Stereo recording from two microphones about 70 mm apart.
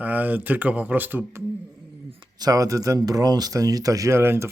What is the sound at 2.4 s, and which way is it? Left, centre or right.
Speech, right.